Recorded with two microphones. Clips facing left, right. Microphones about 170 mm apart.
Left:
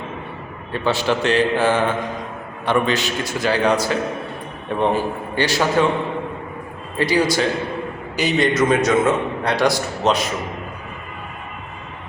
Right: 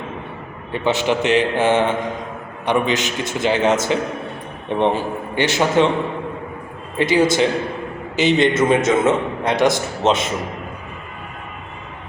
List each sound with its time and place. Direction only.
0.7 s a man's voice: 20° right (ahead or behind)
7.0 s a man's voice: 20° right (ahead or behind)